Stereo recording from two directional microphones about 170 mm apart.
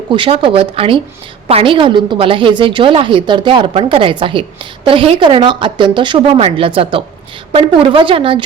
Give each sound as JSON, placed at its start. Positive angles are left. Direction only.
{"t": 0.1, "sound": "a woman's voice", "side_deg": -30}